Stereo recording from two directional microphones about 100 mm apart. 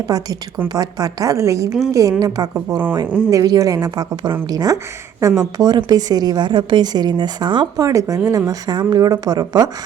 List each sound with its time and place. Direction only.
0.1 s a woman's voice: 40° right (ahead or behind)
7.8 s a woman's voice: 35° right (ahead or behind)